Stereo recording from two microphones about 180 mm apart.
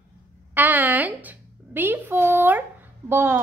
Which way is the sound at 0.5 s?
10° right (ahead or behind).